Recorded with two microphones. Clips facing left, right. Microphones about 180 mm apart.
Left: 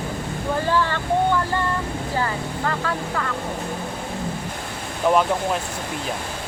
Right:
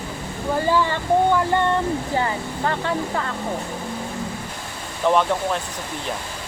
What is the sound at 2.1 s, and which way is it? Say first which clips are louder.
Speech: right 1 dB; 25° right (ahead or behind).